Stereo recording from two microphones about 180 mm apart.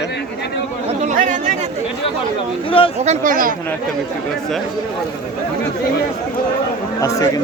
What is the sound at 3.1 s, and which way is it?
Speech, 50° right (ahead or behind).